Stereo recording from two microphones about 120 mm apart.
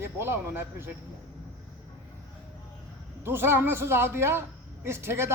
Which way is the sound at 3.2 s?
20° right (ahead or behind).